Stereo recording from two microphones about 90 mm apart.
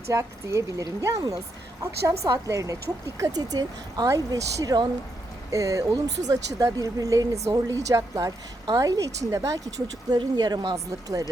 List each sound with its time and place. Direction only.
0.1 s speech: 35° right (ahead or behind)
9.8 s speech: 55° right (ahead or behind)